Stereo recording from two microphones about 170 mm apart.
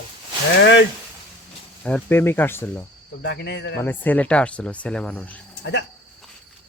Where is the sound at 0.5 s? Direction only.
90° left.